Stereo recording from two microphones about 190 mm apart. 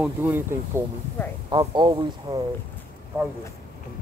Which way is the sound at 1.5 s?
25° right (ahead or behind).